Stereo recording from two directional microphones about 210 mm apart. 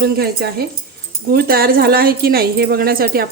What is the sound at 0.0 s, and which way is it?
Speech, 50° right (ahead or behind).